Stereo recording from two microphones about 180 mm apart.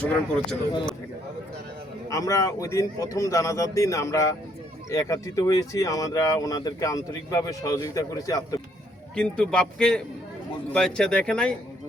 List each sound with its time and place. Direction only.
0.0 s a man's voice: 5° left (ahead or behind)
2.0 s a man's voice: 20° left (ahead or behind)
9.1 s a man's voice: 5° left (ahead or behind)